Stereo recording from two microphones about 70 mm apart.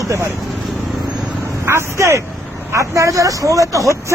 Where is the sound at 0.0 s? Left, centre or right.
Right.